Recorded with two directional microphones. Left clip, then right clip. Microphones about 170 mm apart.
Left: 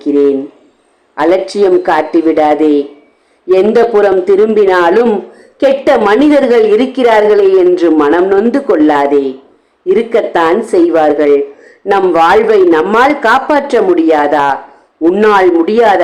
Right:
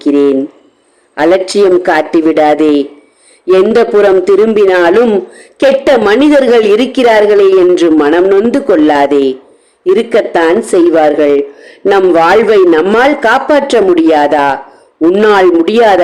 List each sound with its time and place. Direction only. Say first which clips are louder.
0.0 s a man's voice: right 1 dB; 30° right (ahead or behind)